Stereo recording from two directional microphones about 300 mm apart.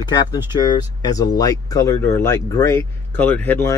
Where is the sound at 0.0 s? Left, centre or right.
Centre.